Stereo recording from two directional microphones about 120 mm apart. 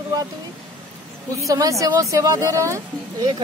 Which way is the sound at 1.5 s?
30° right (ahead or behind).